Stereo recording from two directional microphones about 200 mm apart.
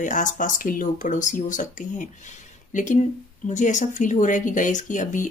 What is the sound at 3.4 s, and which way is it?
Speech, 40° left (ahead or behind).